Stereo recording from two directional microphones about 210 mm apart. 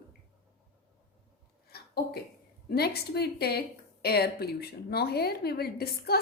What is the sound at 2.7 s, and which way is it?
A woman's voice, 50° left (ahead or behind).